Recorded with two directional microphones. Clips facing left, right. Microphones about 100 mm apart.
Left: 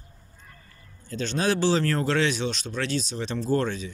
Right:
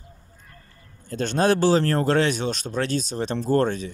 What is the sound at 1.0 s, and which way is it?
Speech, 50° right (ahead or behind).